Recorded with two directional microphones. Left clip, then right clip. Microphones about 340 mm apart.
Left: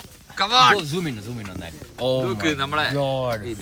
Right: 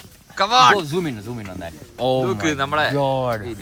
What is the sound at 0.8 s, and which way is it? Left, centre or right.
Speech, right.